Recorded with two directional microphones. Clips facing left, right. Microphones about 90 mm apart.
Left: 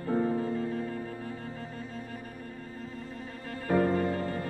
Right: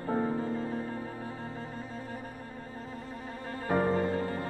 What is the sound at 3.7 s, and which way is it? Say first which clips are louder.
Music: left 1 dB; 30° right (ahead or behind).